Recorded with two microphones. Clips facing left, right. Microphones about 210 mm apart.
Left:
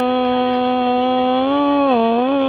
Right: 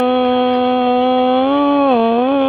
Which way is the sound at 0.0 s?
55° right (ahead or behind).